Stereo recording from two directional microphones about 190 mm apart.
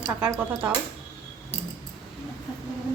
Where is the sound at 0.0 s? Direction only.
10° right (ahead or behind).